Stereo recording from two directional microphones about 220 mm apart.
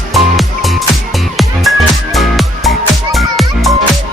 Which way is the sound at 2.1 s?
Centre (ahead or behind).